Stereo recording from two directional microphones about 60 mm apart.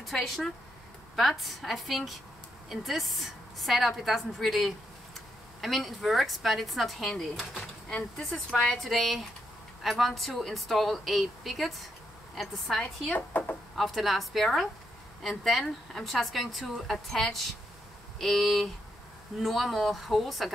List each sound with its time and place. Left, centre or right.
0.0 s a woman's voice: centre
8.8 s speech: centre
13.1 s speech: left
13.7 s speech: centre